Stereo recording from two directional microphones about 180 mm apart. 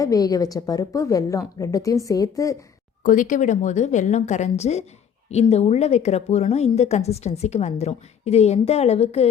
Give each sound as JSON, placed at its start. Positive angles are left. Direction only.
{"t": 0.0, "sound": "a woman's voice", "side_deg": 20}
{"t": 3.0, "sound": "a woman's voice", "side_deg": 45}